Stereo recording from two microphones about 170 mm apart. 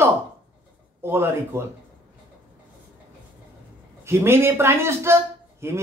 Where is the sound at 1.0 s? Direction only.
15° right (ahead or behind).